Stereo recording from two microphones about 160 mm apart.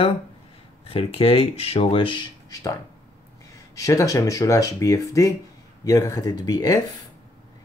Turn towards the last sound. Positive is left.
turn(degrees=25)  # may be behind; listen again after turning